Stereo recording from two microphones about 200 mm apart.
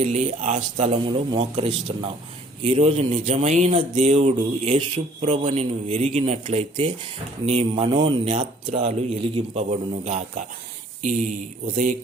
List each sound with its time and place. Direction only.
0.0 s a man's voice: 35° right (ahead or behind)
11.6 s a man's voice: 40° right (ahead or behind)